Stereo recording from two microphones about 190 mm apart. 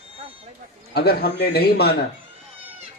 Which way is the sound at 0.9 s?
60° left (ahead or behind).